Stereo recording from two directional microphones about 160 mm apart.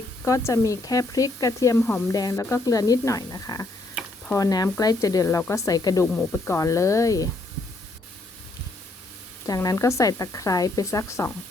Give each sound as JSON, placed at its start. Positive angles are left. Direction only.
{"t": 0.3, "sound": "a woman's voice", "side_deg": 20}
{"t": 9.5, "sound": "a woman's voice", "side_deg": 20}